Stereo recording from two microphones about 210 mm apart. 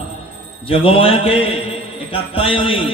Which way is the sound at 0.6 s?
25° left (ahead or behind).